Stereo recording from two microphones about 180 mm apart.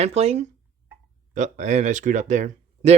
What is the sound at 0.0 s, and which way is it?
Speech, 35° right (ahead or behind).